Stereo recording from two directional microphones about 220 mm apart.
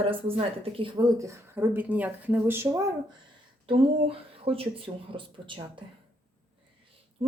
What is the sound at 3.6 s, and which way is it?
Speech, 25° right (ahead or behind).